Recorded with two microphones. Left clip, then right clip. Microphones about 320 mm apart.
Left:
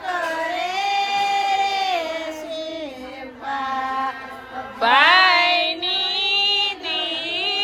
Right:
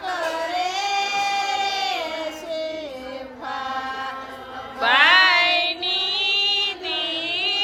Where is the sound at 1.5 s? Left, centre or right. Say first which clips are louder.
Left 3 dB; centre.